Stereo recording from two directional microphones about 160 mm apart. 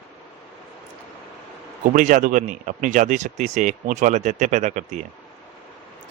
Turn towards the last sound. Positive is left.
turn(degrees=-50)  # may be behind; listen again after turning